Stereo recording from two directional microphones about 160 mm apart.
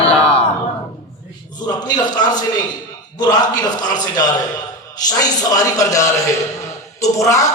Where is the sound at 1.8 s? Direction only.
25° left (ahead or behind).